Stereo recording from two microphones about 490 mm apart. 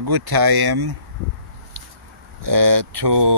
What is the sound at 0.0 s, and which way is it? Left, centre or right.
Speech, right.